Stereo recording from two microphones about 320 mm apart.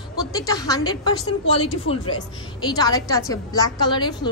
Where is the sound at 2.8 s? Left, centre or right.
Centre.